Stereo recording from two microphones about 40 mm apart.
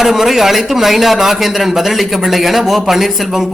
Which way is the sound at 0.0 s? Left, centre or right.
Centre.